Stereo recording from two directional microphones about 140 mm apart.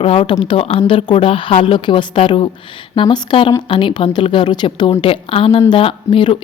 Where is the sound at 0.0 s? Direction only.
40° left (ahead or behind).